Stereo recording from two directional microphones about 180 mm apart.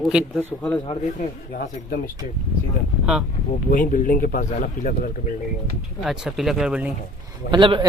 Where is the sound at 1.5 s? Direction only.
55° left (ahead or behind).